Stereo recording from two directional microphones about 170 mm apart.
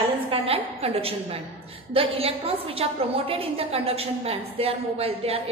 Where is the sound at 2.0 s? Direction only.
35° right (ahead or behind).